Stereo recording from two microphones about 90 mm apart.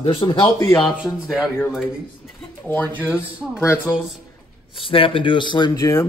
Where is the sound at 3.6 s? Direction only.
30° left (ahead or behind).